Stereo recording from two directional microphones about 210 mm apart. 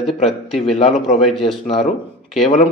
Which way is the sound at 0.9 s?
Centre (ahead or behind).